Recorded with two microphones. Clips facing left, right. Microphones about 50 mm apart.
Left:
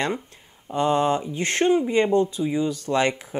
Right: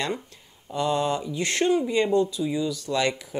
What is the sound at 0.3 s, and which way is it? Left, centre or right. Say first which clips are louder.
Speech: left 4 dB; left.